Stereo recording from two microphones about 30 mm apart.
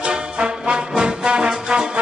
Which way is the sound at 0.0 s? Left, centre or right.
Right.